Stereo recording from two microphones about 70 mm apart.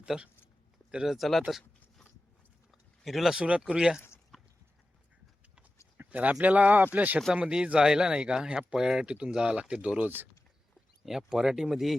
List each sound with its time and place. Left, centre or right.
0.0 s speech: centre
1.1 s speech: centre
3.3 s speech: centre
4.3 s clip-clop: centre
6.0 s a sound: right
6.4 s speech: right
7.3 s speech: centre
11.0 s speech: centre